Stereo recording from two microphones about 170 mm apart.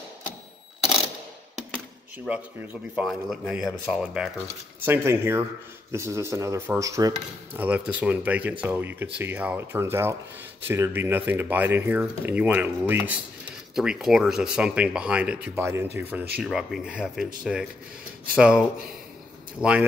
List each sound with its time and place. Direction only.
2.2 s speech: 5° right (ahead or behind)
7.6 s speech: 10° right (ahead or behind)
16.4 s speech: centre (ahead or behind)
19.6 s speech: 15° left (ahead or behind)